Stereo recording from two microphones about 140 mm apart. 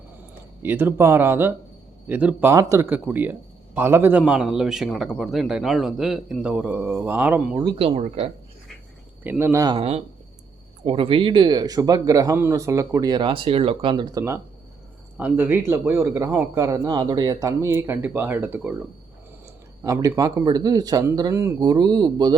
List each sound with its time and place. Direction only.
0.6 s speech: 15° right (ahead or behind)
4.3 s speech: 5° right (ahead or behind)
7.6 s speech: 40° right (ahead or behind)
9.2 s speech: 15° right (ahead or behind)
9.7 s speech: 45° right (ahead or behind); by 18.7 s 15° right (ahead or behind)
19.8 s speech: 25° right (ahead or behind)